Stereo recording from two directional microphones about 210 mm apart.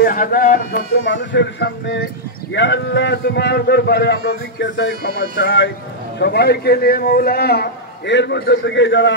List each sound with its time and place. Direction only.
0.0 s a man's voice: 40° left (ahead or behind)
1.0 s a man's voice: 60° left (ahead or behind)